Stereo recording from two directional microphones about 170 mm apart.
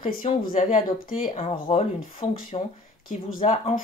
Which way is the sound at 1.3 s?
35° left (ahead or behind).